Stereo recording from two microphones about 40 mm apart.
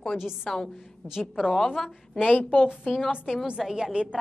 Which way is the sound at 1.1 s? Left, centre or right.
Centre.